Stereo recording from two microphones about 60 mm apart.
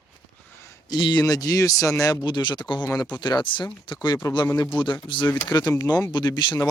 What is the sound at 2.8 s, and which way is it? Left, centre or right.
Speech, left.